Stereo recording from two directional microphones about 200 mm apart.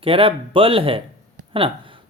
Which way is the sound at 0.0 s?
25° right (ahead or behind).